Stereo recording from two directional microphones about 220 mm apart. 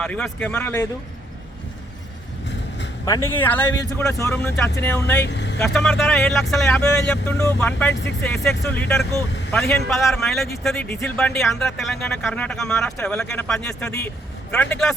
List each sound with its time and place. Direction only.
0.0 s a man's voice: 5° left (ahead or behind)
3.1 s speech: 10° left (ahead or behind)
5.2 s vehicle: 50° left (ahead or behind)
5.5 s a man's voice: 5° left (ahead or behind)